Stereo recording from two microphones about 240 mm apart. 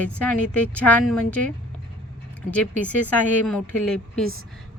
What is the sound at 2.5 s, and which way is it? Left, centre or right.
Speech, centre.